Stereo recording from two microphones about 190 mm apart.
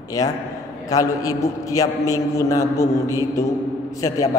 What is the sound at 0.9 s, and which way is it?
A man's voice, 20° left (ahead or behind).